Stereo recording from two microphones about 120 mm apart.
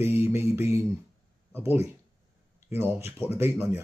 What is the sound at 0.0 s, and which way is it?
Mantra, 20° right (ahead or behind).